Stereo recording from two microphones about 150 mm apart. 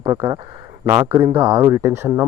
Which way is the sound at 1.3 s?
30° right (ahead or behind).